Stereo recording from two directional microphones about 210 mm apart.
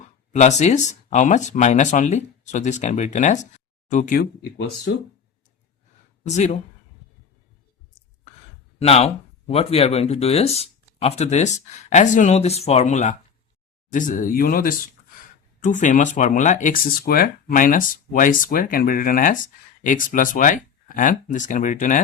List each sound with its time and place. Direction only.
0.3 s speech: 35° left (ahead or behind)
4.9 s speech: 55° left (ahead or behind)
6.2 s speech: 30° left (ahead or behind)
8.8 s speech: 30° left (ahead or behind)